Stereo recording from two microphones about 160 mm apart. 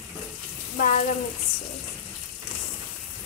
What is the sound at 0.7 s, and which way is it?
Bathtub, 55° left (ahead or behind).